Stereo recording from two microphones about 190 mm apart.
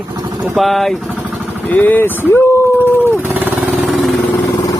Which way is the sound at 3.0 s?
10° right (ahead or behind).